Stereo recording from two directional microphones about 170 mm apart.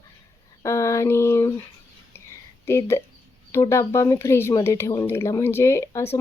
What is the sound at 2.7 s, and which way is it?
Speech, 15° left (ahead or behind).